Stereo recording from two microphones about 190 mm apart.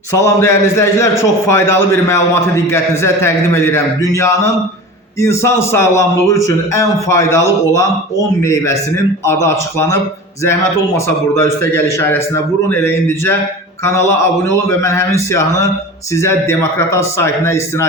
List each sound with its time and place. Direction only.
0.1 s a man's voice: 15° left (ahead or behind)